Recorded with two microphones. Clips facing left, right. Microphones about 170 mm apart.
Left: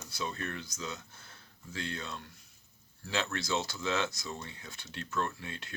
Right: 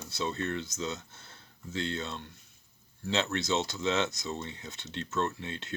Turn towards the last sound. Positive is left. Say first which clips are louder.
# right 3 dB
turn(degrees=-25)  # may be behind; listen again after turning